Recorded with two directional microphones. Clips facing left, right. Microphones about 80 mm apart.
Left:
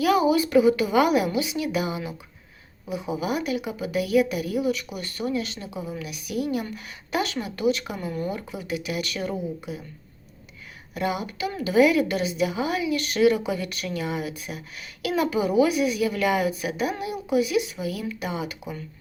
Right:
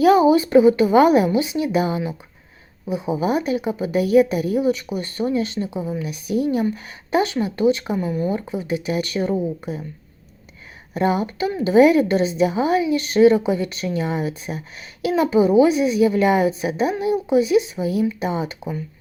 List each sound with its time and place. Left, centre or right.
0.0 s a woman's voice: right
7.9 s speech: centre
8.3 s a woman's voice: right
9.7 s speech: right
10.9 s a woman's voice: right